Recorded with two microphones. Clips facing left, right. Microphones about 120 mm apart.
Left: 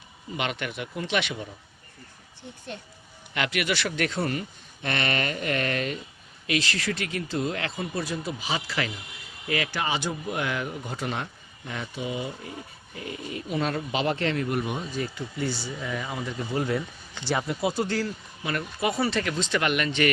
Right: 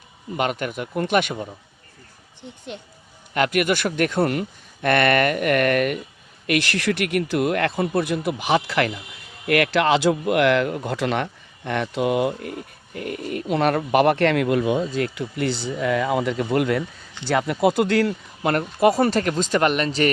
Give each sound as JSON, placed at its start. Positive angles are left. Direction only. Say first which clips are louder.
{"t": 0.3, "sound": "speech", "louder": "right 6 dB", "side_deg": -45}
{"t": 2.4, "sound": "speech", "louder": "right 3 dB", "side_deg": -20}
{"t": 3.3, "sound": "speech", "louder": "right 7 dB", "side_deg": -45}
{"t": 9.5, "sound": "speech", "louder": "right 10 dB", "side_deg": -75}
{"t": 14.9, "sound": "speech", "louder": "right 6 dB", "side_deg": -75}
{"t": 18.9, "sound": "speech", "louder": "right 8 dB", "side_deg": -40}